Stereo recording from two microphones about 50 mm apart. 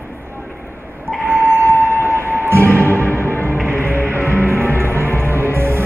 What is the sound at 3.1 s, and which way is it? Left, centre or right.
Music, left.